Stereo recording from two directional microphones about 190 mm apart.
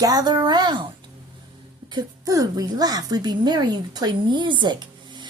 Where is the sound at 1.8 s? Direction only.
20° right (ahead or behind).